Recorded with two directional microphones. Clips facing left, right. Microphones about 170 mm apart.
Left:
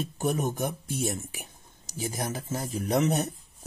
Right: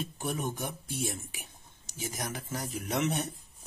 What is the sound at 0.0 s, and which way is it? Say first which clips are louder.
Speech: left 6 dB; 45° left (ahead or behind).